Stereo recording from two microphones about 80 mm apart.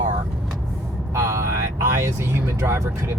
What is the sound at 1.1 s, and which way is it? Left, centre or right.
Speech, right.